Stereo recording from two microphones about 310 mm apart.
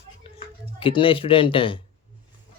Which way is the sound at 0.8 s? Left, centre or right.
Centre.